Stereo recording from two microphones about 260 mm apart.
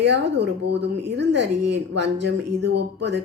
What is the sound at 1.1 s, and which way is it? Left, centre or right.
Speech, right.